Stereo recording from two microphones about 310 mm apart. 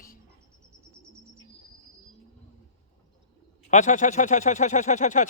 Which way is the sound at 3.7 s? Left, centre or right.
Left.